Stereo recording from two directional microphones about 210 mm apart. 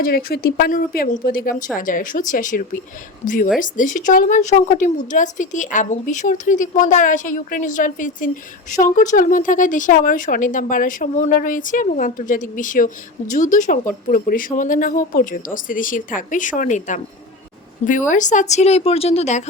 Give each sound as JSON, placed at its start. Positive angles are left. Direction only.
{"t": 0.0, "sound": "speech", "side_deg": 45}
{"t": 18.1, "sound": "speech", "side_deg": 35}